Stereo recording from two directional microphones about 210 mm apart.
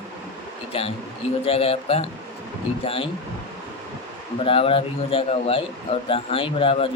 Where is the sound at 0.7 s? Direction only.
25° left (ahead or behind).